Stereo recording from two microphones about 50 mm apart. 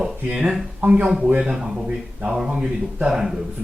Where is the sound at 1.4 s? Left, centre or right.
Centre.